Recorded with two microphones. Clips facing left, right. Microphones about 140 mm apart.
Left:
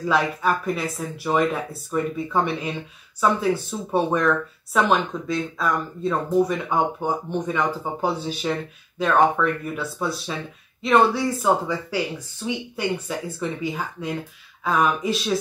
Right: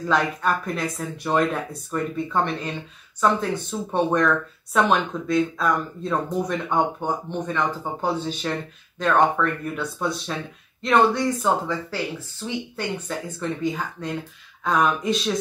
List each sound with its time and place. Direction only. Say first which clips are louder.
0.0 s speech: left 1 dB; 5° left (ahead or behind)